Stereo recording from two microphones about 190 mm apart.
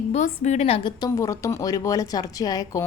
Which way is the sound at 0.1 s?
35° left (ahead or behind).